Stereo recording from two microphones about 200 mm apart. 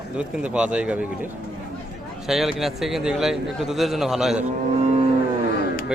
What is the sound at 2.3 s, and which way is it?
A man's voice, centre (ahead or behind).